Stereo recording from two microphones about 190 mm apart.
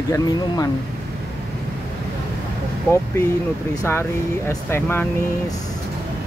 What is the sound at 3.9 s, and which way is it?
Speech, 10° left (ahead or behind).